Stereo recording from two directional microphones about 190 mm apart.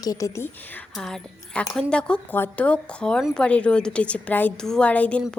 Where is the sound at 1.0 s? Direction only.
5° left (ahead or behind).